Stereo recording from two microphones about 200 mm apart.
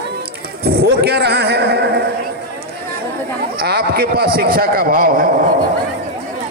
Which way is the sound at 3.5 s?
50° right (ahead or behind).